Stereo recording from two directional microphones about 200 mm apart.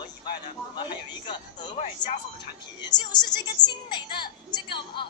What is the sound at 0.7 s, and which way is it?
A woman's voice, 20° left (ahead or behind).